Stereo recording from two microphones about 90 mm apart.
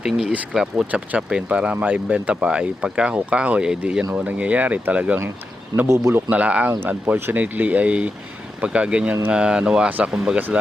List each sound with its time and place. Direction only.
0.0 s speech: 10° right (ahead or behind)
5.9 s a man's voice: 30° right (ahead or behind)
6.3 s speech: 15° right (ahead or behind)